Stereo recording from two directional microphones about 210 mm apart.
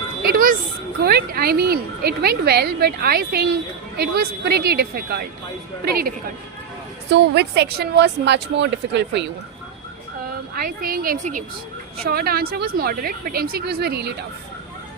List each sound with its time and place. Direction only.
0.2 s a sound: 45° right (ahead or behind)
1.0 s a woman's voice: 45° right (ahead or behind)
7.1 s speech: 55° right (ahead or behind)
10.5 s a woman's voice: 45° right (ahead or behind)